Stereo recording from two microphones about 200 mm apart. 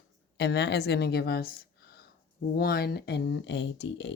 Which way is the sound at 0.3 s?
55° left (ahead or behind).